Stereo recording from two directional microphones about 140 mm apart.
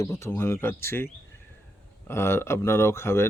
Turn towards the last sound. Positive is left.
turn(degrees=15)  # may be behind; listen again after turning